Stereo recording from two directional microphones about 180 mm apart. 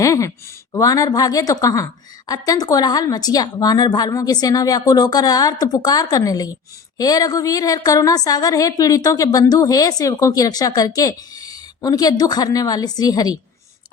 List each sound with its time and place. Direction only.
0.0 s speech: 15° left (ahead or behind)